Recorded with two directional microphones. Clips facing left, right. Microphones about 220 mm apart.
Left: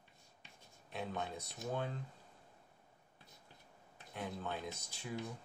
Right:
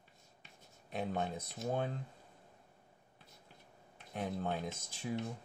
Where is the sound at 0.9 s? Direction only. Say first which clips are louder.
Right 5 dB; 50° right (ahead or behind).